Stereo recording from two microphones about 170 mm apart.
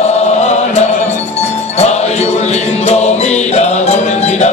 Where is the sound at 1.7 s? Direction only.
40° left (ahead or behind).